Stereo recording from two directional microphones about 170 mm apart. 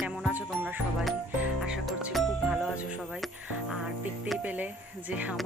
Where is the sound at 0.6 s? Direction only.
10° right (ahead or behind).